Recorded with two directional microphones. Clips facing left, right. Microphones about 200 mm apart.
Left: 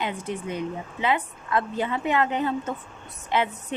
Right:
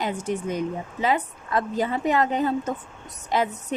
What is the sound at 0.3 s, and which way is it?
Speech, 45° right (ahead or behind).